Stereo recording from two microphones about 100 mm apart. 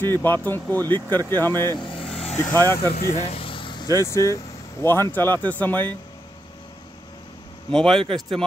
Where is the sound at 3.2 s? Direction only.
70° left (ahead or behind); by 3.9 s 55° left (ahead or behind).